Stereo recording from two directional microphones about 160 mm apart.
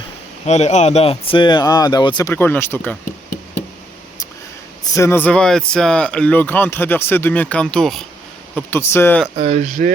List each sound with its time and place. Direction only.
0.4 s speech: 45° left (ahead or behind); by 2.3 s 25° left (ahead or behind)
2.3 s speech: 15° left (ahead or behind)
4.8 s speech: 15° left (ahead or behind)
8.5 s speech: 15° left (ahead or behind)
9.4 s speech: 45° right (ahead or behind)